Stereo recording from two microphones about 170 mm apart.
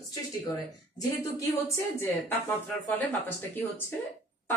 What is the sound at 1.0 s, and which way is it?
Speech, 20° left (ahead or behind).